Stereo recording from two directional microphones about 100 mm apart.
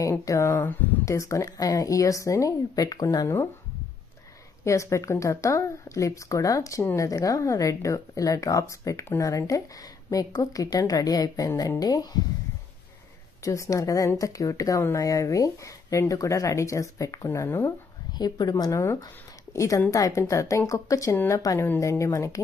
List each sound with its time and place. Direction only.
0.2 s speech: 30° left (ahead or behind)
4.6 s speech: 30° left (ahead or behind)
13.4 s speech: 30° left (ahead or behind)
18.1 s a woman's voice: 40° left (ahead or behind)